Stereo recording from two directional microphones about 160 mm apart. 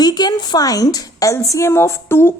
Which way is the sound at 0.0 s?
25° left (ahead or behind).